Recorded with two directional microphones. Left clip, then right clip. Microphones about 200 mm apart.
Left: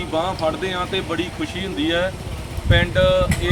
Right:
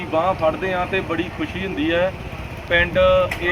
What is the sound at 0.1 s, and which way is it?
Speech, 10° right (ahead or behind).